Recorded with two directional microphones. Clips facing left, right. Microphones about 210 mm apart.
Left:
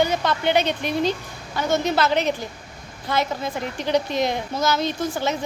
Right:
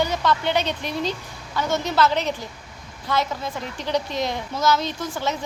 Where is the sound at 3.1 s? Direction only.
55° left (ahead or behind).